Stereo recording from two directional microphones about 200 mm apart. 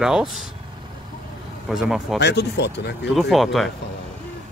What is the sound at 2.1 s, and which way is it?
Speech, 60° left (ahead or behind).